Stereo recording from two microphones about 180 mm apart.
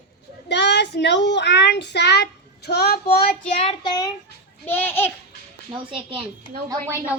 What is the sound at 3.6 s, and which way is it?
Child singing, 25° left (ahead or behind).